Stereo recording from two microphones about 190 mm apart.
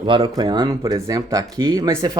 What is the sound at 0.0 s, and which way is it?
Speech, 25° right (ahead or behind).